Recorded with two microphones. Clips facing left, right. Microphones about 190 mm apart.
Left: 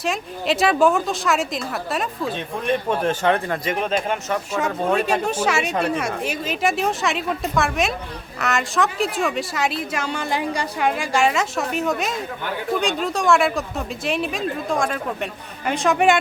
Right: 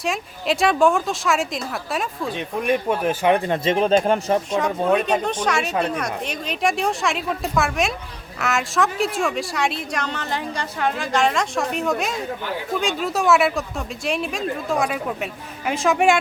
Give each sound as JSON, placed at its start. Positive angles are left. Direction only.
{"t": 0.0, "sound": "a woman's voice", "side_deg": 0}
{"t": 2.3, "sound": "speech", "side_deg": -15}
{"t": 4.9, "sound": "a woman's voice", "side_deg": 5}